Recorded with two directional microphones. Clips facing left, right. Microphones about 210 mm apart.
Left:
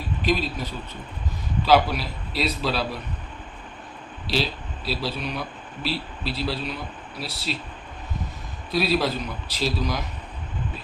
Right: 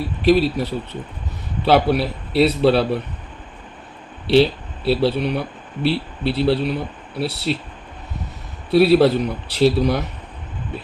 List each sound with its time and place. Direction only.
0.3 s speech: 65° right (ahead or behind)
4.3 s speech: 65° right (ahead or behind)
8.7 s speech: 65° right (ahead or behind)